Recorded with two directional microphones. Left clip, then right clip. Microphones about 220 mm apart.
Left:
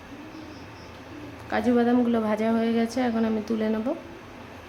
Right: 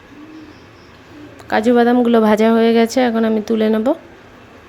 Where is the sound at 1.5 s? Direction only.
35° right (ahead or behind).